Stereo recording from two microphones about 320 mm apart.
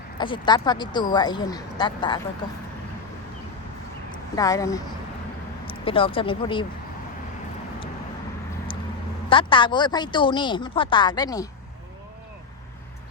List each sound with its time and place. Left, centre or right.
0.2 s speech: centre
4.1 s speech: centre
9.3 s speech: centre